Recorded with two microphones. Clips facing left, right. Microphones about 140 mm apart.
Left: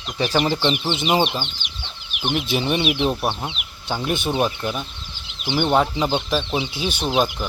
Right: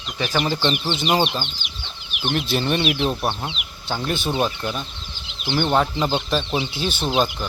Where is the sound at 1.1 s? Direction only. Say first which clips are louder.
Left 1 dB; 5° left (ahead or behind).